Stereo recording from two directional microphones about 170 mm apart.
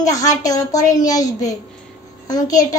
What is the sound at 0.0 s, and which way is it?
A child's voice, 20° left (ahead or behind).